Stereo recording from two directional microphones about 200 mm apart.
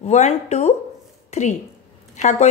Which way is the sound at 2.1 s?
35° left (ahead or behind).